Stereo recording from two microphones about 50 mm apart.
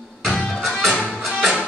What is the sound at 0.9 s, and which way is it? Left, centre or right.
Music, centre.